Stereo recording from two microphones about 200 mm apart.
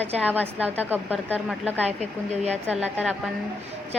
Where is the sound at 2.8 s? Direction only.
5° right (ahead or behind).